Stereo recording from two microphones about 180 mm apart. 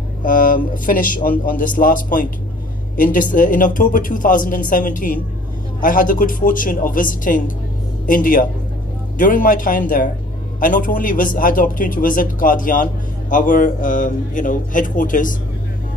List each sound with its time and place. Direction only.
0.2 s speech: 50° left (ahead or behind)